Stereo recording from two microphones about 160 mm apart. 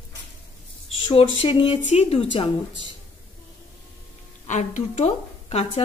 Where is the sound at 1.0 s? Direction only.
35° left (ahead or behind).